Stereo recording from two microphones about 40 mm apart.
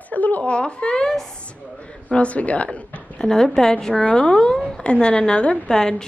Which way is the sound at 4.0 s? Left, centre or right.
Left.